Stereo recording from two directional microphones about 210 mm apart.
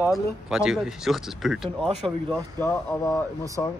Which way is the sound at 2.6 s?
10° left (ahead or behind).